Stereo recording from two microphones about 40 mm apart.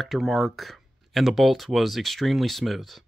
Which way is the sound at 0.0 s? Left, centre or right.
Centre.